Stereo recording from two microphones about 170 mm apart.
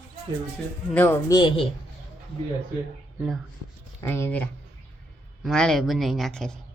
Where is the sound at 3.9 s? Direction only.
15° left (ahead or behind).